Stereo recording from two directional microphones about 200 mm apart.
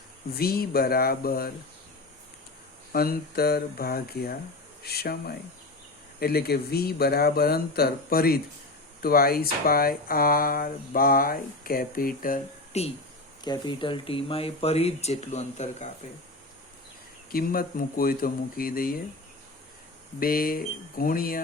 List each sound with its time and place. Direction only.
0.3 s speech: 50° left (ahead or behind)
2.9 s speech: 50° left (ahead or behind)
13.4 s speech: 20° left (ahead or behind)
17.3 s speech: 45° left (ahead or behind)
20.1 s speech: 45° left (ahead or behind)